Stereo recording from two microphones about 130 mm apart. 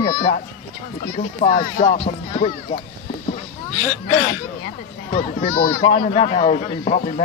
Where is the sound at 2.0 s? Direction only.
50° left (ahead or behind).